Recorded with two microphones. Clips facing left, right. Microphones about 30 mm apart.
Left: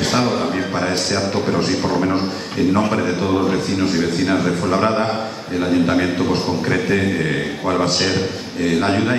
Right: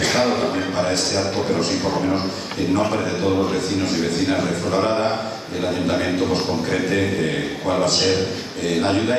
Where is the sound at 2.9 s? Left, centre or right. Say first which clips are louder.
Left 2 dB; centre.